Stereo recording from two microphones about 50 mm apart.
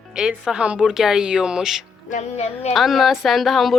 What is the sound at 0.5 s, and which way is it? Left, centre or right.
Child singing, right.